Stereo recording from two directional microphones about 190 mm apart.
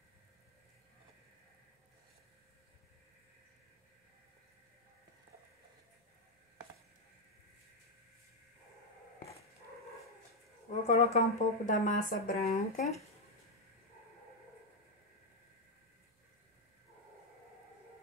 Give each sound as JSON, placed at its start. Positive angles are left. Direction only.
{"t": 10.7, "sound": "speech", "side_deg": 35}